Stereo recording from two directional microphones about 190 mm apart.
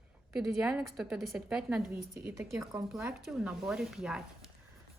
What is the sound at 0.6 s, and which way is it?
A woman's voice, 5° right (ahead or behind).